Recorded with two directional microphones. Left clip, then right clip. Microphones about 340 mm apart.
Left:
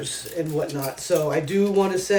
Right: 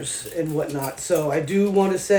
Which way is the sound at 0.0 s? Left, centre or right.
Centre.